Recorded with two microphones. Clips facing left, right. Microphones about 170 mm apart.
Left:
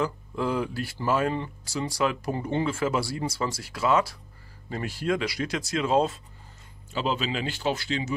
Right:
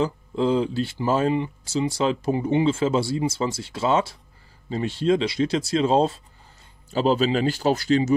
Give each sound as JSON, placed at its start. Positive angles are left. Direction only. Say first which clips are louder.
{"t": 0.0, "sound": "speech", "louder": "right 5 dB", "side_deg": -25}